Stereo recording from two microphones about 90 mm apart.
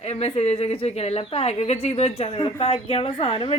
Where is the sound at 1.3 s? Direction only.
90° left.